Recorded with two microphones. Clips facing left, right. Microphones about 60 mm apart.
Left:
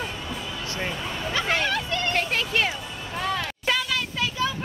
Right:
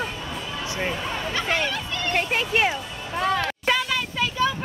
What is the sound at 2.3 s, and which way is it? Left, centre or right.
Speech, centre.